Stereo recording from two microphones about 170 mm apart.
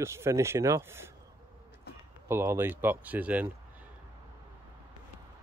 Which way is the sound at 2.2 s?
15° right (ahead or behind).